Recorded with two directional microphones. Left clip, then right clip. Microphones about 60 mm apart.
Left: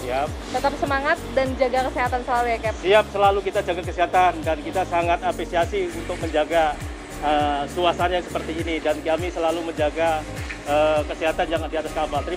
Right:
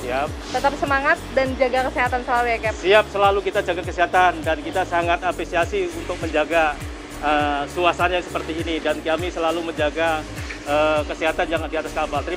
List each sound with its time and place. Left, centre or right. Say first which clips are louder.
0.1 s speech: right 1 dB; right
0.8 s speech: right 3 dB; centre
2.8 s speech: right 1 dB; right